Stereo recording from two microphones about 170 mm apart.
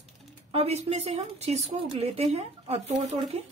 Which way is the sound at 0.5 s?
35° right (ahead or behind).